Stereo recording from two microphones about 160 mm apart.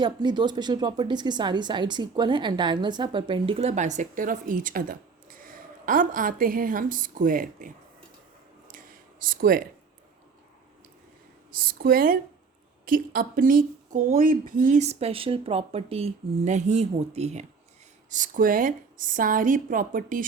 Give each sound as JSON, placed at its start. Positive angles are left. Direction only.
{"t": 0.0, "sound": "speech", "side_deg": -25}
{"t": 9.2, "sound": "a woman's voice", "side_deg": -60}
{"t": 11.5, "sound": "a woman's voice", "side_deg": -65}
{"t": 18.1, "sound": "a woman's voice", "side_deg": -55}